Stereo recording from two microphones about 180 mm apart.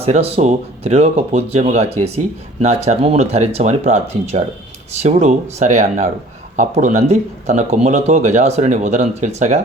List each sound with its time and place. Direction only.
0.0 s speech: 35° right (ahead or behind)